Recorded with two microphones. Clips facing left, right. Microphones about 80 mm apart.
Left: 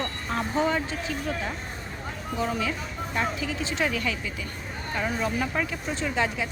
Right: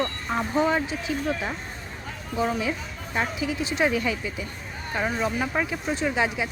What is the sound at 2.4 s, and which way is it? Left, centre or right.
Speech, centre.